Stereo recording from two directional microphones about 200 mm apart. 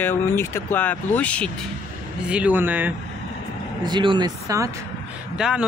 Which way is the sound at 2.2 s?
5° right (ahead or behind).